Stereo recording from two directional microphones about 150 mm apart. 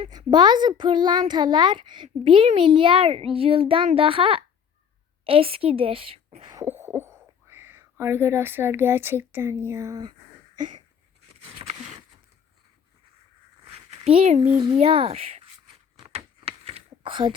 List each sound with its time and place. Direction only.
0.1 s a child's voice: 30° right (ahead or behind)
0.8 s child singing: 30° right (ahead or behind)
2.1 s a child's voice: 35° right (ahead or behind)
6.4 s beatboxing: 25° right (ahead or behind)
6.7 s speech: 15° right (ahead or behind)
10.6 s a sound: 55° right (ahead or behind)
14.0 s speech: 50° right (ahead or behind)
14.7 s a child's voice: 40° right (ahead or behind)
16.0 s a sound: 35° right (ahead or behind)